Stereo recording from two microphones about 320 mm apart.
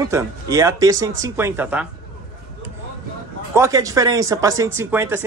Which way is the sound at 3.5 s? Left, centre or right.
Centre.